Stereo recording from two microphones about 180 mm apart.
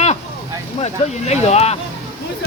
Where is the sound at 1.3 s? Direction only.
35° left (ahead or behind).